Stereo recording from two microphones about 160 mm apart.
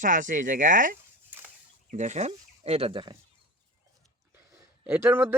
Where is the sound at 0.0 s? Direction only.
55° right (ahead or behind); by 3.2 s 30° right (ahead or behind).